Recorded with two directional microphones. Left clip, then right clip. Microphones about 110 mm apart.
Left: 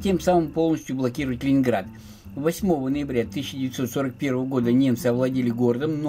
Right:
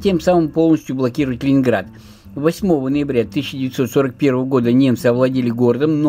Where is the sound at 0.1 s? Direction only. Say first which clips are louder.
Right 4 dB; 35° right (ahead or behind).